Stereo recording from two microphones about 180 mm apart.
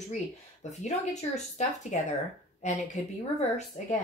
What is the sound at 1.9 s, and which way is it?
Speech, 40° left (ahead or behind).